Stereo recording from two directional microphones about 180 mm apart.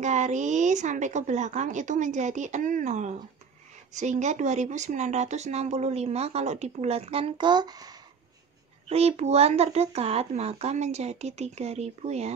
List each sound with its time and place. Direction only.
0.0 s a woman's voice: 40° right (ahead or behind); by 8.0 s 20° right (ahead or behind)
8.8 s speech: 35° right (ahead or behind)